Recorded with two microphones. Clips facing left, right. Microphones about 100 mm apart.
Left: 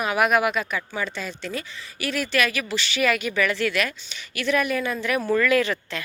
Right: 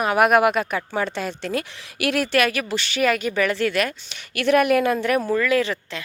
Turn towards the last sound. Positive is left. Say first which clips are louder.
# even
turn(degrees=-25)  # may be behind; listen again after turning